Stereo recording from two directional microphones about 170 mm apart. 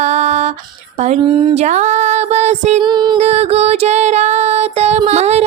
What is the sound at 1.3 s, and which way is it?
Speech, 30° right (ahead or behind).